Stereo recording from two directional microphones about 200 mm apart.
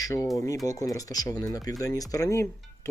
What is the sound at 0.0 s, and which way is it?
Speech, 15° left (ahead or behind).